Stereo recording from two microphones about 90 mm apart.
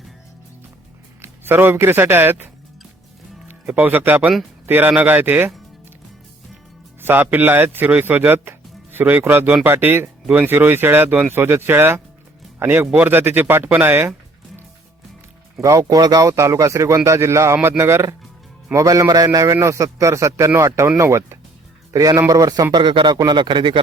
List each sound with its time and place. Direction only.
1.2 s speech: 25° right (ahead or behind)
3.5 s speech: 20° right (ahead or behind)
7.0 s a man's voice: 20° right (ahead or behind)
15.8 s speech: 50° right (ahead or behind); by 21.3 s 30° right (ahead or behind)
21.9 s a man's voice: 40° right (ahead or behind); by 23.8 s 60° right (ahead or behind)